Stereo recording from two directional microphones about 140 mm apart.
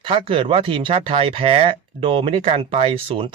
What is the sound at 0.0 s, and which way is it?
Speech, 40° right (ahead or behind).